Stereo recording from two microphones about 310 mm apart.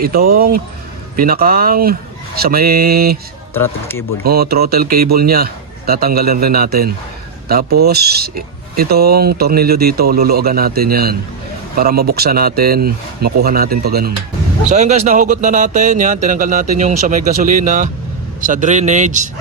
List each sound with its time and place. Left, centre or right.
0.0 s speech: right
3.5 s speech: centre
4.2 s speech: right